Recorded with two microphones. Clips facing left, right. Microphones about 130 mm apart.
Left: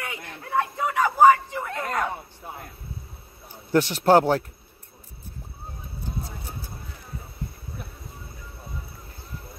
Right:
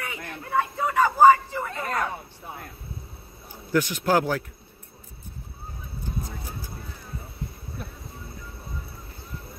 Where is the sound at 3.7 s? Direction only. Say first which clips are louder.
Left 4 dB; 30° left (ahead or behind).